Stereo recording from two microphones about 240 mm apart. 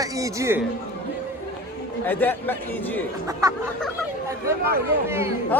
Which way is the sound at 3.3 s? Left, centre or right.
Centre.